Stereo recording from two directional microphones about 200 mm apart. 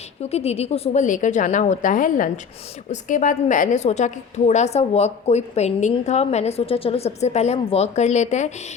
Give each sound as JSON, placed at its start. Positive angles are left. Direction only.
{"t": 0.2, "sound": "a woman's voice", "side_deg": 30}